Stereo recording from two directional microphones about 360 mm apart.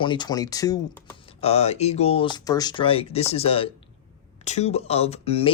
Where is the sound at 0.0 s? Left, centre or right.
Centre.